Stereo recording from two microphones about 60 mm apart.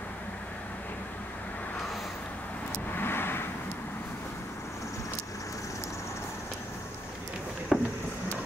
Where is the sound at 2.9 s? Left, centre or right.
Left.